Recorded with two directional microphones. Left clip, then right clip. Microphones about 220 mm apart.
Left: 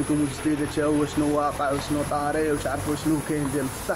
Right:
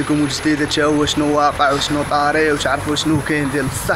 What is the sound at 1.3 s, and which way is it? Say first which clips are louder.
Speech: right 12 dB; 25° right (ahead or behind).